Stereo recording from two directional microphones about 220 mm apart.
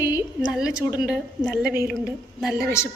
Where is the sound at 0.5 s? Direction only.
Centre (ahead or behind).